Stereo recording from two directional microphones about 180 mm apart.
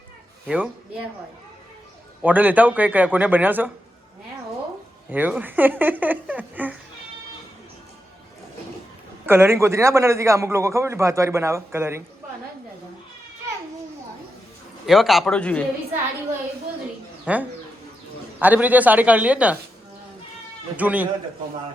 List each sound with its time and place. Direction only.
0.4 s a man's voice: 5° right (ahead or behind)
2.2 s a man's voice: 10° right (ahead or behind)
5.0 s a man's voice: 10° right (ahead or behind)
9.2 s a man's voice: 10° right (ahead or behind)
14.8 s speech: centre (ahead or behind)
17.3 s a man's voice: 10° right (ahead or behind)
20.7 s a man's voice: 10° right (ahead or behind)